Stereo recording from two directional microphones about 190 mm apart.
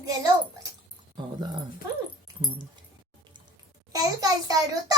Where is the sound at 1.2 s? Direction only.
25° right (ahead or behind).